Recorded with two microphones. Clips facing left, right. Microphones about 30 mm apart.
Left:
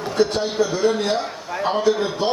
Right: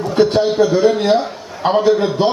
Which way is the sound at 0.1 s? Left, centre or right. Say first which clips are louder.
Right 6 dB; right.